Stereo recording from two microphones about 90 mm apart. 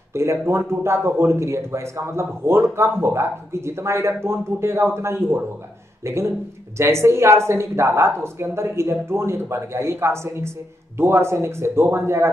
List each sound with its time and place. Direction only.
0.1 s a man's voice: 30° right (ahead or behind)